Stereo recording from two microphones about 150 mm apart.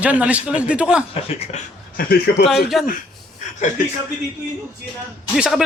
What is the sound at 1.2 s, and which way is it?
Speech, 45° left (ahead or behind).